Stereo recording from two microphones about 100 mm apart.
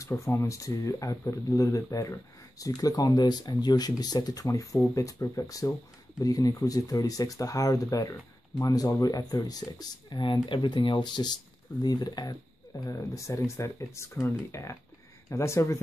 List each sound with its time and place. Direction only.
0.0 s speech: 30° left (ahead or behind)